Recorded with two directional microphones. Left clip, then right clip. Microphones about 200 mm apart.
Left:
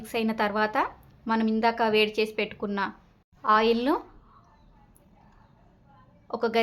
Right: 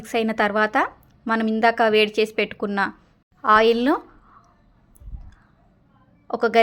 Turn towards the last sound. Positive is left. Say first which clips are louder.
# right 7 dB
turn(degrees=-30)  # may be behind; listen again after turning